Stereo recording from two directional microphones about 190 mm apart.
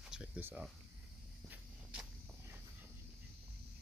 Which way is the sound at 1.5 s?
5° right (ahead or behind).